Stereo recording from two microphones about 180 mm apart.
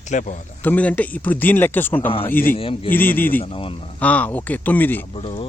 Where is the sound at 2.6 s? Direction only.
30° left (ahead or behind).